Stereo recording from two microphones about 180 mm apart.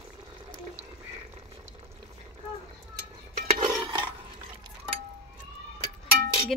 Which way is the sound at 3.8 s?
25° right (ahead or behind).